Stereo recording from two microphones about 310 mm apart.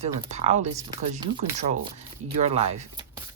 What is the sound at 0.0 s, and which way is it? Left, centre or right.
Speech, right.